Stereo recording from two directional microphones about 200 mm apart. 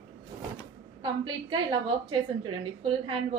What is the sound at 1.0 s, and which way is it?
A woman's voice, 25° right (ahead or behind).